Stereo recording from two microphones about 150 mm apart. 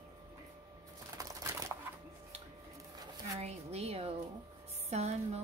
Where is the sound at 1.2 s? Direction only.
20° right (ahead or behind).